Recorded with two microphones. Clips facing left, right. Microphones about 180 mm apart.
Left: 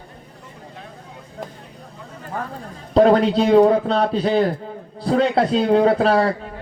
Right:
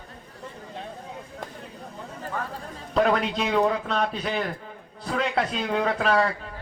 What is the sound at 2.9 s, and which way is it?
A man's voice, 35° left (ahead or behind).